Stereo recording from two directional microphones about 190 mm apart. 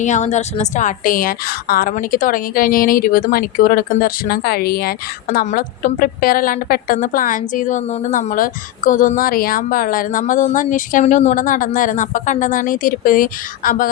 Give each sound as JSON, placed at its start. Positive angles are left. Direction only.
{"t": 0.0, "sound": "a woman's voice", "side_deg": 40}